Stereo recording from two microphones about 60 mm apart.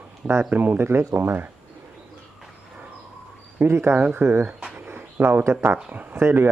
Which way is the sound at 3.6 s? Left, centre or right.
Right.